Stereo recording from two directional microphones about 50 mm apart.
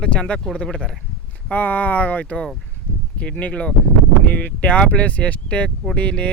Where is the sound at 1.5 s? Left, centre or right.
Left.